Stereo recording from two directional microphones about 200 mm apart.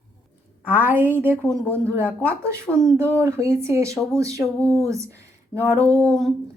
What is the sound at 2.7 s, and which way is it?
Speech, 15° right (ahead or behind).